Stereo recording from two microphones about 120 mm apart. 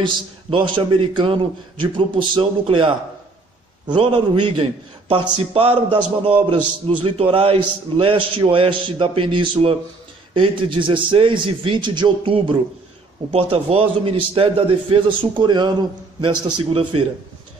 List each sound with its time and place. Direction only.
0.0 s a man's voice: 45° right (ahead or behind)